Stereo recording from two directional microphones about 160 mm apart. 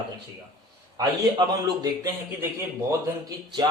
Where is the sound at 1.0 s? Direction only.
25° right (ahead or behind).